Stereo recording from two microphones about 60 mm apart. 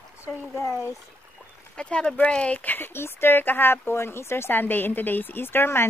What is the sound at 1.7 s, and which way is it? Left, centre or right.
Speech, centre.